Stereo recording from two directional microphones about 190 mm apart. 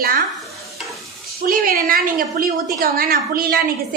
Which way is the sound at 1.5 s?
50° right (ahead or behind).